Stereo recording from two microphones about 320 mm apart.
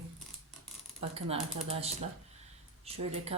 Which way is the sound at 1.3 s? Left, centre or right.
Centre.